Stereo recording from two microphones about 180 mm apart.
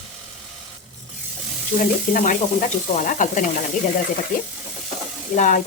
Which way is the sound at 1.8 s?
45° left (ahead or behind).